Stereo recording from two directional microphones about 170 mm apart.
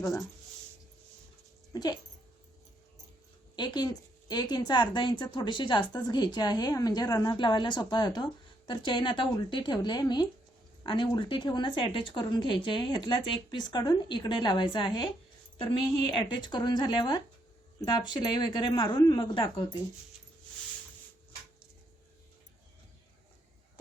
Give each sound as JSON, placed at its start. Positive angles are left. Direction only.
{"t": 0.0, "sound": "speech", "side_deg": 15}
{"t": 1.7, "sound": "speech", "side_deg": 25}
{"t": 3.5, "sound": "a woman's voice", "side_deg": 25}